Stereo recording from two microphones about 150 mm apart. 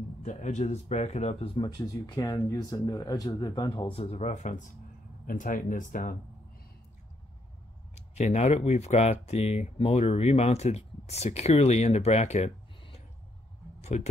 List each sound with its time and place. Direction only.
0.2 s speech: 55° left (ahead or behind)
7.9 s speech: 50° left (ahead or behind)
13.7 s a sound: 50° left (ahead or behind)